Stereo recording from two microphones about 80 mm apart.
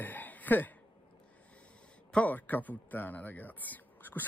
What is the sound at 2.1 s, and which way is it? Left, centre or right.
A man's voice, centre.